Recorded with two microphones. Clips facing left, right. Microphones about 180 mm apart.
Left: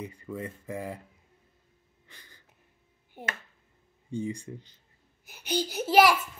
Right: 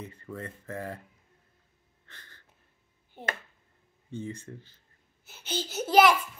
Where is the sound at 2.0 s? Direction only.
10° left (ahead or behind).